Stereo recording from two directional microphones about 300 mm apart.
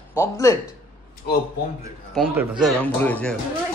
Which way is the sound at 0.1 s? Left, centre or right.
Centre.